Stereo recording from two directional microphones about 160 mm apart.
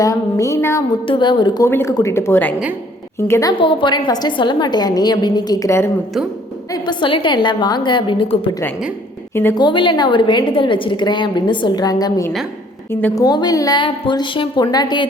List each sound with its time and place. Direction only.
0.0 s a woman's voice: 20° left (ahead or behind)
1.0 s a woman's voice: 30° left (ahead or behind); by 3.5 s 15° left (ahead or behind)
3.6 s a woman's voice: 30° left (ahead or behind)
6.7 s a woman's voice: 30° left (ahead or behind)
9.3 s a woman's voice: 15° left (ahead or behind)
9.6 s a woman's voice: 30° left (ahead or behind); by 13.2 s 15° left (ahead or behind)
13.2 s a woman's voice: 25° left (ahead or behind)